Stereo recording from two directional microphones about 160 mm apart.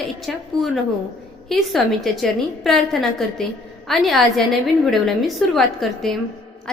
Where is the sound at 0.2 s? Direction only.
Centre (ahead or behind).